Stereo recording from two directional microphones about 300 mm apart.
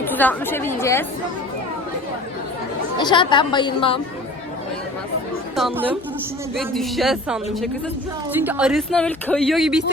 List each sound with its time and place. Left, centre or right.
0.0 s a woman's voice: centre
3.0 s a woman's voice: centre
5.5 s speech: centre